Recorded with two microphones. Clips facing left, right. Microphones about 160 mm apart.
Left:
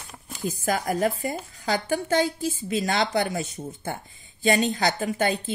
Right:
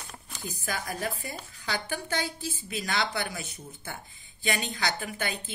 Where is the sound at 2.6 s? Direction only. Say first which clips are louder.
Left 6 dB; 40° left (ahead or behind).